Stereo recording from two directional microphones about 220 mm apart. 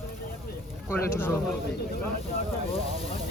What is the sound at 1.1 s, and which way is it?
Speech, 10° left (ahead or behind).